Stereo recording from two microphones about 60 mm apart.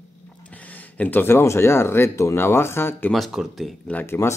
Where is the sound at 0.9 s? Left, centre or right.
Left.